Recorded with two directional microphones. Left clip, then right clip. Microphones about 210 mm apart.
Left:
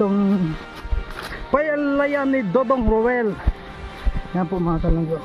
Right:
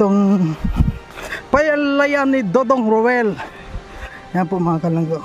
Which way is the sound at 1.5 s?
45° right (ahead or behind).